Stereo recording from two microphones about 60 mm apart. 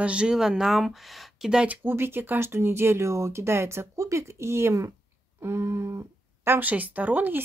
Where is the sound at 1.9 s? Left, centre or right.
Right.